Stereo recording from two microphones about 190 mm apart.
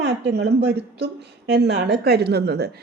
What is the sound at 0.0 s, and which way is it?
Speech, 60° right (ahead or behind).